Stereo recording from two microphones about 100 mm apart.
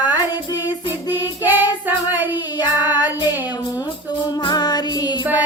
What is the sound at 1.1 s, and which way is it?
Child singing, 20° right (ahead or behind).